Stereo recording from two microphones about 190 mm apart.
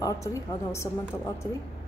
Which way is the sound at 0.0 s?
15° left (ahead or behind).